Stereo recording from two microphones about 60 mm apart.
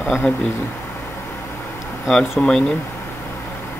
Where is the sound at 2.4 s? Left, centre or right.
Left.